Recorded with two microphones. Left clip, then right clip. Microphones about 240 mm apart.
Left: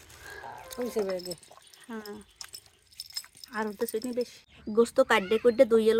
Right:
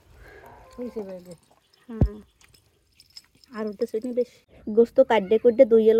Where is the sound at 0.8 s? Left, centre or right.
Left.